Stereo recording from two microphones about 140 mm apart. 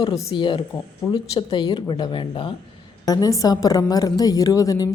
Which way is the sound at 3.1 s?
25° left (ahead or behind).